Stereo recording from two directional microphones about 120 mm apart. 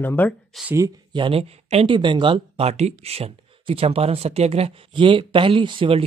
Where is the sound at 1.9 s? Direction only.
40° right (ahead or behind).